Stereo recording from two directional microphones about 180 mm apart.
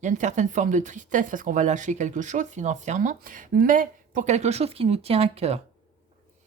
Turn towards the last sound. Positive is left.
turn(degrees=-35)  # may be behind; listen again after turning